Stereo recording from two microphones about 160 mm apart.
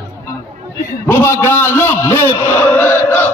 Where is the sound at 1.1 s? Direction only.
15° left (ahead or behind).